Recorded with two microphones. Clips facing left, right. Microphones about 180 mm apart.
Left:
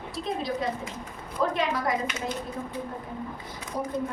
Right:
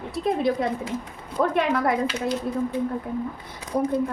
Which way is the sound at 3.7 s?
60° right (ahead or behind).